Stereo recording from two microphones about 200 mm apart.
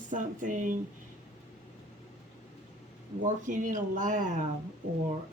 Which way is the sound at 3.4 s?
40° right (ahead or behind).